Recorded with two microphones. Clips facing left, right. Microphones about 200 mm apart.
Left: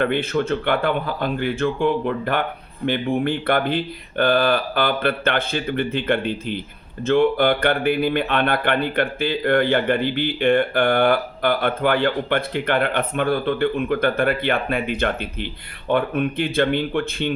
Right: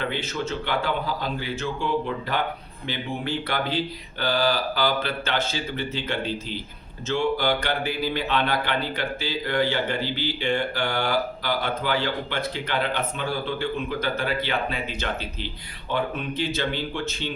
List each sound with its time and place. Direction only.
0.0 s speech: 55° left (ahead or behind)